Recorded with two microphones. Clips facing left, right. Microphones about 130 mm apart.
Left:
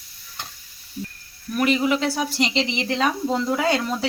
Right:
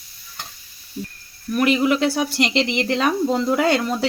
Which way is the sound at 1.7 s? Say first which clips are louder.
Right 3 dB; 70° right (ahead or behind).